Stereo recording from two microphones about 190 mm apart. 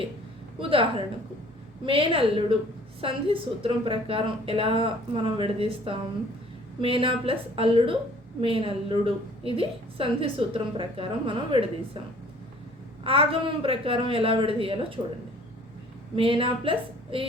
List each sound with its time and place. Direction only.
0.6 s a woman's voice: 30° right (ahead or behind)
13.1 s a woman's voice: 30° right (ahead or behind)
16.1 s a woman's voice: 30° right (ahead or behind)